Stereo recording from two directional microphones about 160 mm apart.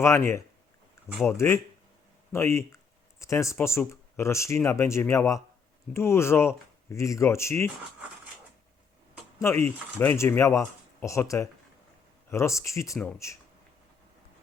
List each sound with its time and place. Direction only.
0.0 s speech: 15° left (ahead or behind)
9.4 s speech: 15° left (ahead or behind)